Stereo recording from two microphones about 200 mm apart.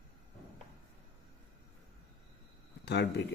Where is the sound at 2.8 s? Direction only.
55° left (ahead or behind).